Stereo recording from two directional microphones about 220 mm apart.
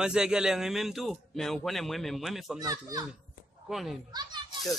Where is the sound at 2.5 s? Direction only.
15° right (ahead or behind).